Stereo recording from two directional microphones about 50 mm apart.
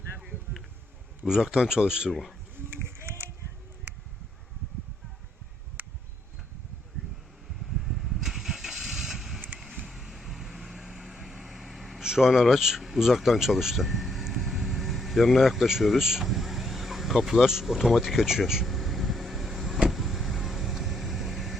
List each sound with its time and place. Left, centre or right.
1.2 s speech: centre
2.0 s speech: centre
2.6 s run: right
5.8 s a sound: right
7.8 s vehicle: centre
12.0 s a sound: centre
19.9 s vehicle: centre